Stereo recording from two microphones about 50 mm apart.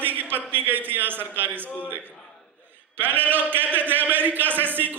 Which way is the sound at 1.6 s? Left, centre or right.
Left.